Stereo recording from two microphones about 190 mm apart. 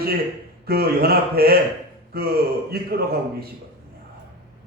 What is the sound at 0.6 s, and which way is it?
A man's voice, 55° right (ahead or behind).